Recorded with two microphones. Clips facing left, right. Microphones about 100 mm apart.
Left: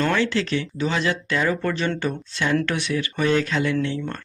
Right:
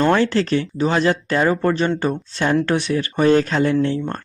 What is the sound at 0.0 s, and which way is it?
Speech, 40° right (ahead or behind).